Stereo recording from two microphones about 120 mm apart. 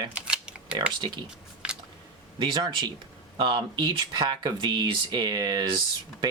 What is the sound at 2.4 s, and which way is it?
Speech, 40° right (ahead or behind).